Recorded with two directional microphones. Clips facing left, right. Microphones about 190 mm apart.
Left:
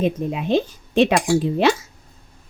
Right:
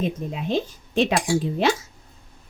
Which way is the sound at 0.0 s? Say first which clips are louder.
Left 5 dB; 70° left (ahead or behind).